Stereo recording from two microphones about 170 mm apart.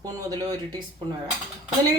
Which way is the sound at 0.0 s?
20° right (ahead or behind).